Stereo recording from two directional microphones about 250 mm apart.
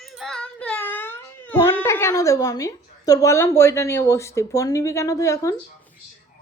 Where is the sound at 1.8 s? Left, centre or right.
Centre.